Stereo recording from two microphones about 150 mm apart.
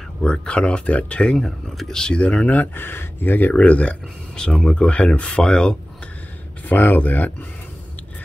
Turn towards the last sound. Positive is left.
turn(degrees=10)  # may be behind; listen again after turning